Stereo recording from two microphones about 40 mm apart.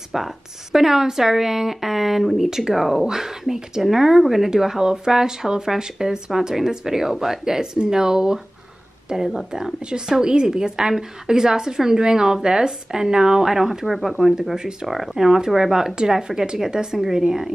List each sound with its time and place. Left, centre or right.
0.1 s speech: centre